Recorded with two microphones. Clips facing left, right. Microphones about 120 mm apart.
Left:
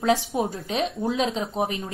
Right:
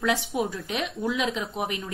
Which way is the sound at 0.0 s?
30° left (ahead or behind).